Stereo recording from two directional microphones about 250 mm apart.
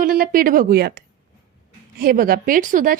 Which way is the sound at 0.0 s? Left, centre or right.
Right.